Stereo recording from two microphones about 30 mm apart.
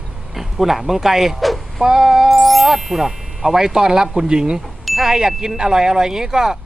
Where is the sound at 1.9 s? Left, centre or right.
Centre.